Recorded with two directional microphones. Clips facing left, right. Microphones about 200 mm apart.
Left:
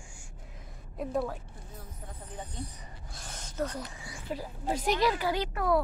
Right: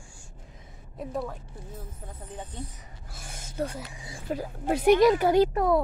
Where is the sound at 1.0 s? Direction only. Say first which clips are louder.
Left 1 dB; centre (ahead or behind).